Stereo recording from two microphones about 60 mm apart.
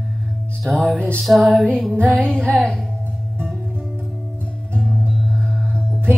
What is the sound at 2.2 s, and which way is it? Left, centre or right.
Music, centre.